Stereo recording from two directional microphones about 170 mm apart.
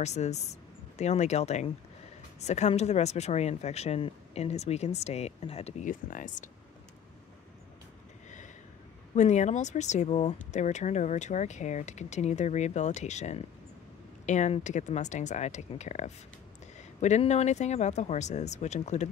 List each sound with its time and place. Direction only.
0.0 s speech: 40° left (ahead or behind)
9.1 s speech: 45° left (ahead or behind)